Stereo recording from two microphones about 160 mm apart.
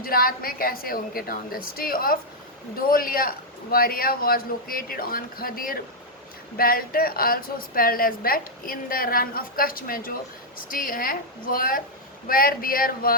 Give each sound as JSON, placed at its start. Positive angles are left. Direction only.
{"t": 0.0, "sound": "a woman's voice", "side_deg": 65}